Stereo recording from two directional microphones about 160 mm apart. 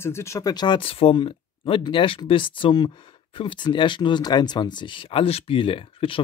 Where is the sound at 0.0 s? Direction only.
15° left (ahead or behind).